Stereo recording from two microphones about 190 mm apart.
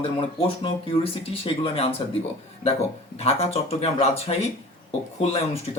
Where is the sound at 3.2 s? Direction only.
30° left (ahead or behind).